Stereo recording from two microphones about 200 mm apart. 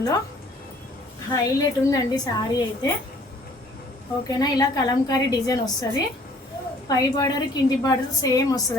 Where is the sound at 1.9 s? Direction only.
20° left (ahead or behind).